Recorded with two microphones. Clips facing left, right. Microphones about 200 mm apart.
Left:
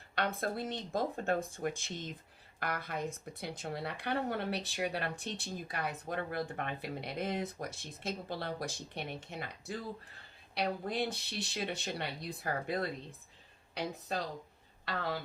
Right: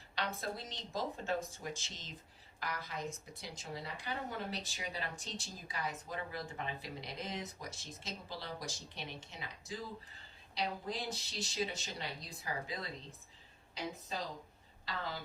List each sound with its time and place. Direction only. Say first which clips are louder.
0.2 s speech: left 6 dB; 55° left (ahead or behind)